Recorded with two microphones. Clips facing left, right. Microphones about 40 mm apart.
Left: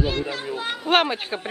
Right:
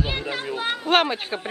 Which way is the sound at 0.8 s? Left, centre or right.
Centre.